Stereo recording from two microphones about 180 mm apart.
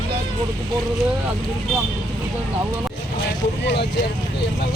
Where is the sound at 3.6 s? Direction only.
70° left (ahead or behind).